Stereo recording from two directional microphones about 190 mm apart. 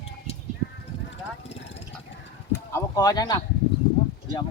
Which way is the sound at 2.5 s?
15° left (ahead or behind).